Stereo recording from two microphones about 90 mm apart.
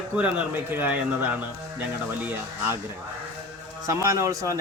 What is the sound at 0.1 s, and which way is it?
Speech, 15° right (ahead or behind).